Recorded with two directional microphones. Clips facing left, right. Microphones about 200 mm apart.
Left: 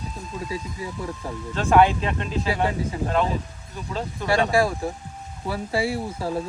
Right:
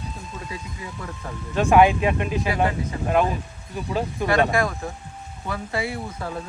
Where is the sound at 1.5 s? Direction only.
10° right (ahead or behind).